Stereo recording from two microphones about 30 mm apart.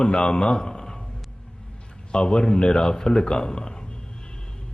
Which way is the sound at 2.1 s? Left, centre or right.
Left.